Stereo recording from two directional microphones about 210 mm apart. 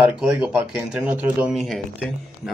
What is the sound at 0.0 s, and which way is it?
A man's voice, 5° right (ahead or behind).